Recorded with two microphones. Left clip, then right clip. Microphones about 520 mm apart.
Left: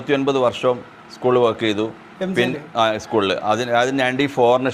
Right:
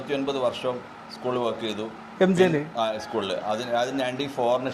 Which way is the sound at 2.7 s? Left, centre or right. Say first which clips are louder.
Left 8 dB; left.